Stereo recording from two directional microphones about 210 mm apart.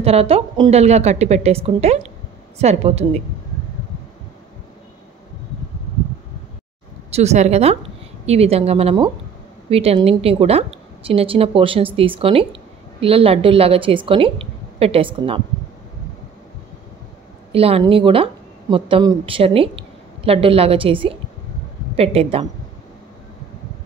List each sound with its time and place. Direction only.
0.0 s a woman's voice: 30° right (ahead or behind)
7.1 s a woman's voice: 30° right (ahead or behind)
17.5 s a woman's voice: 30° right (ahead or behind)